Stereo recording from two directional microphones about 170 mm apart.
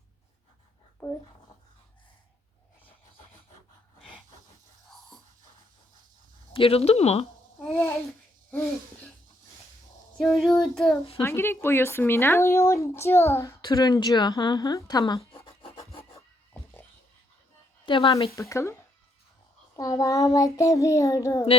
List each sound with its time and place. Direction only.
6.5 s speech: 35° left (ahead or behind)
10.2 s child singing: centre (ahead or behind)
11.2 s speech: 15° left (ahead or behind)
17.8 s child singing: 30° left (ahead or behind)
18.3 s speech: 15° left (ahead or behind)
19.7 s child singing: 20° left (ahead or behind)